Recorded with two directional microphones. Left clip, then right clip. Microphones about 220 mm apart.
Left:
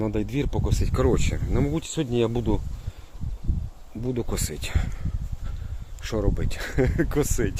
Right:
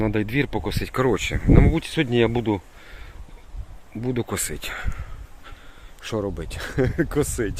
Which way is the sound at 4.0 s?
10° right (ahead or behind).